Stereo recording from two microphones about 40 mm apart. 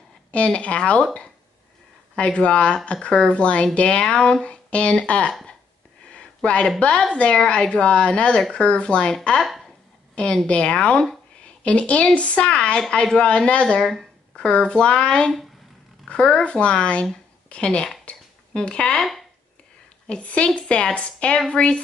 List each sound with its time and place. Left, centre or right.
0.3 s speech: left
2.1 s speech: left
6.1 s a sound: left
6.8 s speech: left
9.5 s a sound: centre
10.1 s speech: left
18.1 s a sound: left
18.6 s speech: left
20.1 s speech: left